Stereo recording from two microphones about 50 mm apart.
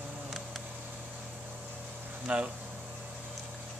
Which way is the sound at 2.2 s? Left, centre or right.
Right.